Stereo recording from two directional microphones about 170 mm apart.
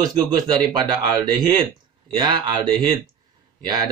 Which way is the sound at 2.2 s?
25° right (ahead or behind).